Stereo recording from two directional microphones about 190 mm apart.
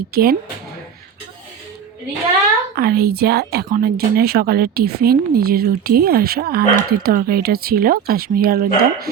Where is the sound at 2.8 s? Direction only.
55° right (ahead or behind).